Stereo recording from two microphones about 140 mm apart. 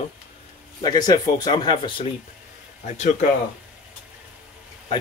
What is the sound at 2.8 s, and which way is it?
Speech, 55° left (ahead or behind).